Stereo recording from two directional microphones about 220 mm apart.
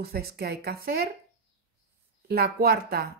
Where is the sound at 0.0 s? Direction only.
45° right (ahead or behind).